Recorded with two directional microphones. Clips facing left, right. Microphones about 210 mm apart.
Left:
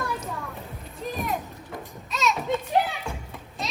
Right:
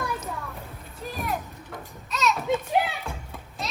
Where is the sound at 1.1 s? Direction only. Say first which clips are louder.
Even; centre (ahead or behind).